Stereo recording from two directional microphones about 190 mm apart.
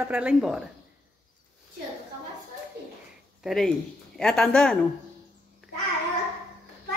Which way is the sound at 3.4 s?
Centre (ahead or behind).